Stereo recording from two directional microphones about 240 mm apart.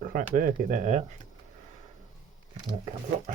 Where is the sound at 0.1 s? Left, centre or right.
Right.